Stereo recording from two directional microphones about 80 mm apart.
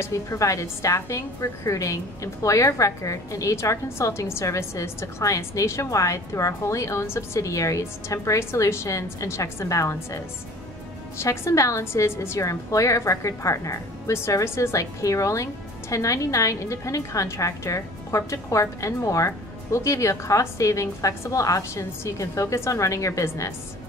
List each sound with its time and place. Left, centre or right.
0.0 s a woman's voice: left